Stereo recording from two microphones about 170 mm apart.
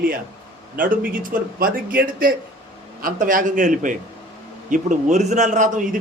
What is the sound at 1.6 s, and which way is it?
A man's voice, 60° right (ahead or behind).